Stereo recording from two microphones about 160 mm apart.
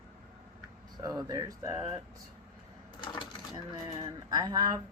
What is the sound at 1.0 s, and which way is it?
Speech, 25° right (ahead or behind).